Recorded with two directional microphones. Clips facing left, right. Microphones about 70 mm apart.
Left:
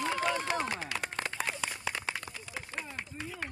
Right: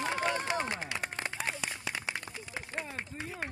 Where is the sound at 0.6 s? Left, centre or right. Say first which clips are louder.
Left 1 dB; centre.